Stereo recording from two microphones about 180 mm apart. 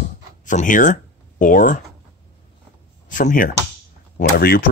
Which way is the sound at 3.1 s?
45° left (ahead or behind).